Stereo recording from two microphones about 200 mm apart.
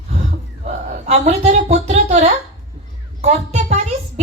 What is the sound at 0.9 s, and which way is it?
A woman's voice, 35° right (ahead or behind).